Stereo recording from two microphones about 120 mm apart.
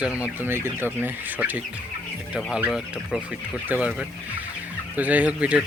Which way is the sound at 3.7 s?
10° right (ahead or behind).